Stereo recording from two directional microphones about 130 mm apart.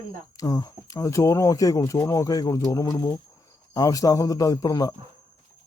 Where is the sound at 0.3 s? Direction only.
30° left (ahead or behind).